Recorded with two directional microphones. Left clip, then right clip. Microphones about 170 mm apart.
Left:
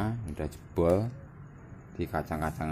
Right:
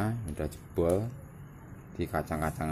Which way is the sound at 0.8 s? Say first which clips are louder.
Left 3 dB; 25° left (ahead or behind).